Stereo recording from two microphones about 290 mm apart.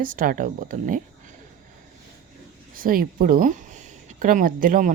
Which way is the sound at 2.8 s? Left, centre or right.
Right.